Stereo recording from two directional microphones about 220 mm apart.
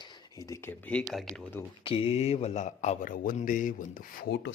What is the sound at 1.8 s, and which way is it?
Speech, 25° left (ahead or behind).